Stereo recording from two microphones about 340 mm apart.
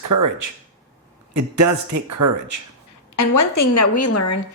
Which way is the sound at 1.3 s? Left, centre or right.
Right.